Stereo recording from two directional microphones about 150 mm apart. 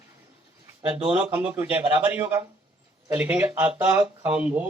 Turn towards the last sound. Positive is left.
turn(degrees=-10)  # may be behind; listen again after turning